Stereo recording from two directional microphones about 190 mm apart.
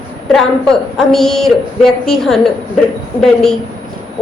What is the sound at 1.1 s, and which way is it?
A woman's voice, centre (ahead or behind).